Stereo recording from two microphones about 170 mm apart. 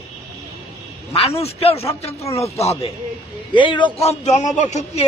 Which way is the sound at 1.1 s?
35° left (ahead or behind).